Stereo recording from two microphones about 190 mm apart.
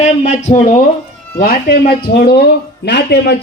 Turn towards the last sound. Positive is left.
turn(degrees=60)  # may be behind; listen again after turning